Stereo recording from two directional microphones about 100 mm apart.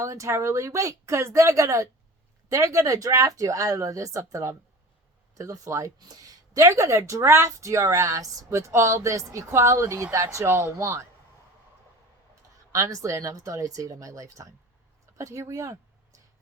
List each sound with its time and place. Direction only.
0.0 s speech: 30° right (ahead or behind)
12.7 s speech: 30° right (ahead or behind)